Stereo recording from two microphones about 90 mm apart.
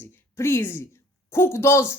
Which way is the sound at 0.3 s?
30° left (ahead or behind).